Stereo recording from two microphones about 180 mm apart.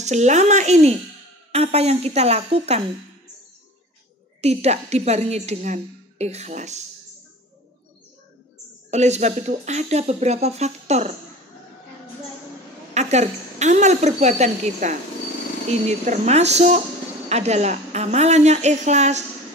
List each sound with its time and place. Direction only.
0.0 s a woman's voice: 40° right (ahead or behind)
4.4 s a woman's voice: 35° right (ahead or behind)
8.9 s a woman's voice: 40° right (ahead or behind)
12.9 s a woman's voice: 40° right (ahead or behind)